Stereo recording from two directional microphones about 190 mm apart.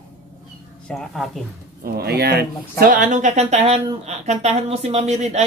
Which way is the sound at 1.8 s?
55° right (ahead or behind).